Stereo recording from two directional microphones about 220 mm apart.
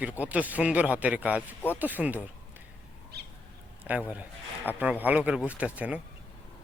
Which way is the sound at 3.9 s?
5° right (ahead or behind).